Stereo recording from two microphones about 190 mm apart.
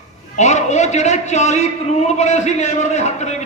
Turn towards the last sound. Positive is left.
turn(degrees=35)  # may be behind; listen again after turning